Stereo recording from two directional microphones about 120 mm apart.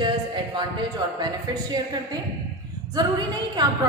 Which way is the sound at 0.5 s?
40° right (ahead or behind).